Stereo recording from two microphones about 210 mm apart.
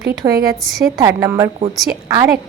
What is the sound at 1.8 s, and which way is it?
Speech, centre (ahead or behind).